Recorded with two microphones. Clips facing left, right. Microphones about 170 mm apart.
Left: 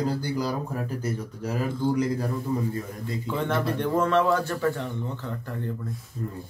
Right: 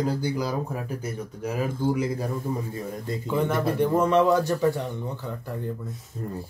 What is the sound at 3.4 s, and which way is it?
Speech, 10° right (ahead or behind).